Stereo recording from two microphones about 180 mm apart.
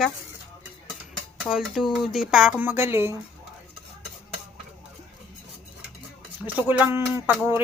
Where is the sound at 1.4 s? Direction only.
Centre (ahead or behind).